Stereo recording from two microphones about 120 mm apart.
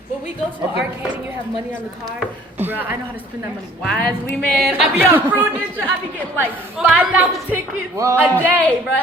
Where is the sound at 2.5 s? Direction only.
15° right (ahead or behind).